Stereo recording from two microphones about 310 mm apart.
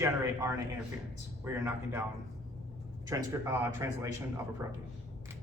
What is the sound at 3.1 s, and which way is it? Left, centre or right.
Speech, centre.